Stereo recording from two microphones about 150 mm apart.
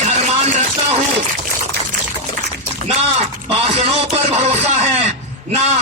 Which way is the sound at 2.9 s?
40° right (ahead or behind).